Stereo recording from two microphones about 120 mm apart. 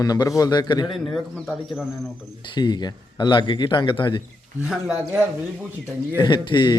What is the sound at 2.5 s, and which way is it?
A man's voice, 35° left (ahead or behind).